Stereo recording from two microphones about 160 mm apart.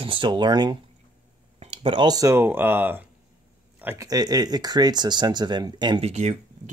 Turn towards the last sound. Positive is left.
turn(degrees=-45)  # may be behind; listen again after turning